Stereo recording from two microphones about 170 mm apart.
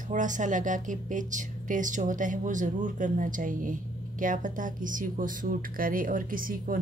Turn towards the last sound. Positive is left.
turn(degrees=-55)  # may be behind; listen again after turning